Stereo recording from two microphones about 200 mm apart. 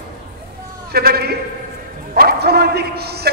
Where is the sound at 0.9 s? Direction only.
50° right (ahead or behind).